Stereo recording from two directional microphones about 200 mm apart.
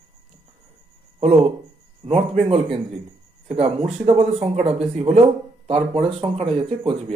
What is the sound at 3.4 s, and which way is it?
Speech, 30° right (ahead or behind).